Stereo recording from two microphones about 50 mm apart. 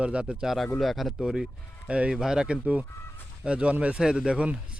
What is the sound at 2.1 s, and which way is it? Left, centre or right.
A man's voice, centre.